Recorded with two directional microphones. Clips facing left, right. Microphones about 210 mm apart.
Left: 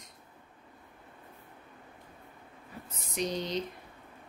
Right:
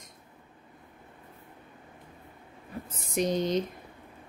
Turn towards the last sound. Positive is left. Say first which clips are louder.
# right 6 dB
turn(degrees=-50)  # may be behind; listen again after turning